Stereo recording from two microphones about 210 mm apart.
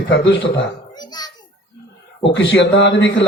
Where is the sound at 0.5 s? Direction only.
20° left (ahead or behind).